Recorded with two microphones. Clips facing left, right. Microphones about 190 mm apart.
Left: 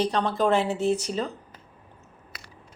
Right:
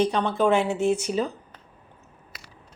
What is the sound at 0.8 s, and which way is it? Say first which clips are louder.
Speech: right 2 dB; 35° left (ahead or behind).